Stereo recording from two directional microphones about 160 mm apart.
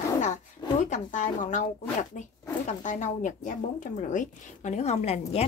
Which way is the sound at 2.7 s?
50° left (ahead or behind).